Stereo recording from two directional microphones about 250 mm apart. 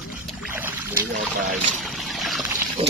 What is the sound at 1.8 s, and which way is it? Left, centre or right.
Boat, centre.